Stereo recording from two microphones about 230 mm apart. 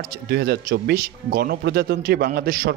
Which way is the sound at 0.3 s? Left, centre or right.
Right.